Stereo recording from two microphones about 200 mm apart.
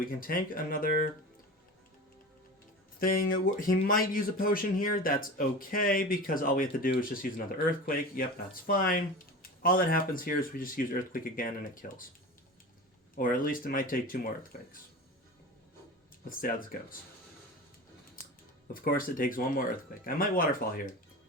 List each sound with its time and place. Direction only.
0.2 s speech: 45° left (ahead or behind)
3.0 s speech: 45° left (ahead or behind)
13.1 s speech: 45° left (ahead or behind)
18.7 s speech: 45° left (ahead or behind)